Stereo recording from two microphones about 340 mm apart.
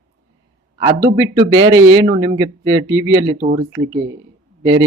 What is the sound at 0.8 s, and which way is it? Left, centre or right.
Speech, centre.